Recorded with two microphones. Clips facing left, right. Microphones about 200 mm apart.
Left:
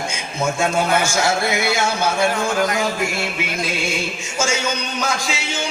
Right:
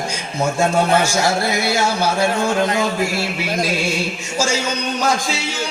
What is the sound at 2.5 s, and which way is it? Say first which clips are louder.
A man's voice: right 2 dB; 25° right (ahead or behind).